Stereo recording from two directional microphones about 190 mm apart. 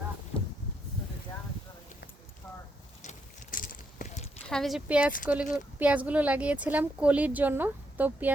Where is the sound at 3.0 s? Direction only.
40° left (ahead or behind).